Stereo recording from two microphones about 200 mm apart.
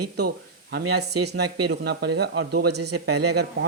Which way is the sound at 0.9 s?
55° right (ahead or behind).